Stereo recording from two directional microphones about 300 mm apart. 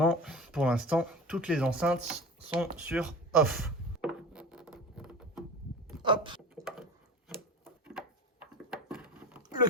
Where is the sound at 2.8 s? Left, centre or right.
Centre.